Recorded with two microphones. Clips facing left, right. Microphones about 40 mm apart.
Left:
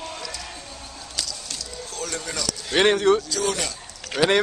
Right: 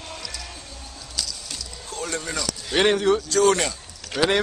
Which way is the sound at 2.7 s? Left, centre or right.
Centre.